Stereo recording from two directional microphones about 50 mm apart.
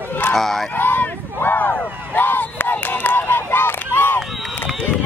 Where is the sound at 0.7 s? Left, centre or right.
Left.